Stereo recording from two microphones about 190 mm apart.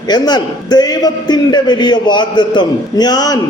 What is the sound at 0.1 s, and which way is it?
A man's voice, 20° left (ahead or behind).